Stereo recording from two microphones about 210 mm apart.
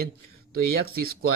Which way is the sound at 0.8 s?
45° right (ahead or behind).